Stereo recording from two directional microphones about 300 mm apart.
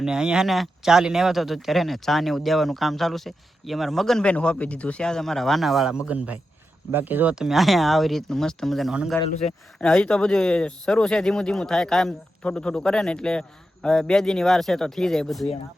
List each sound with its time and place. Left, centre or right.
0.0 s speech: centre
9.2 s speech: left
9.7 s speech: centre